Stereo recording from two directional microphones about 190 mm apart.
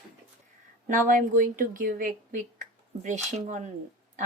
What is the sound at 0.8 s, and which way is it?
Speech, 45° right (ahead or behind).